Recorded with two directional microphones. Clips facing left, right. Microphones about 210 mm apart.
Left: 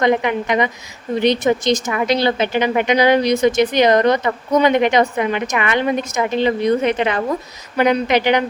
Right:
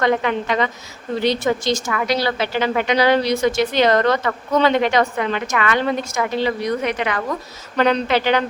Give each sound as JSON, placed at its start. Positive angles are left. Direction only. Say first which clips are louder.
{"t": 0.0, "sound": "a woman's voice", "louder": "left 2 dB", "side_deg": 15}
{"t": 7.8, "sound": "speech", "louder": "left 2 dB", "side_deg": 10}